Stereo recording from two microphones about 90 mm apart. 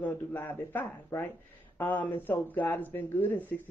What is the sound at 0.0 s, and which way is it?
Speech, 20° left (ahead or behind).